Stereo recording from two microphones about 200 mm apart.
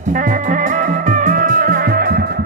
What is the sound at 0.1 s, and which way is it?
Music, 40° right (ahead or behind).